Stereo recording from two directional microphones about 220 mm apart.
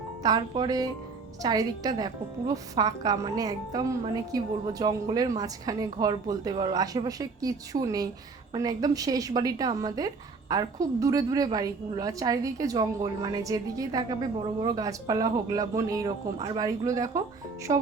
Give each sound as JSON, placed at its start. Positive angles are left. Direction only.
{"t": 0.2, "sound": "a woman's voice", "side_deg": -20}